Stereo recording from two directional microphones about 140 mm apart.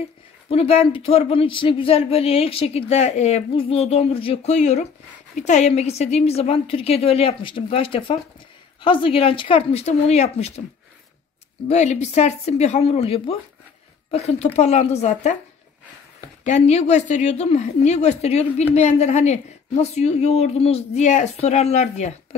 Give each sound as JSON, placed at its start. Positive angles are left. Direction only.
{"t": 0.5, "sound": "a woman's voice", "side_deg": 45}
{"t": 11.6, "sound": "a woman's voice", "side_deg": 55}
{"t": 16.4, "sound": "a woman's voice", "side_deg": 50}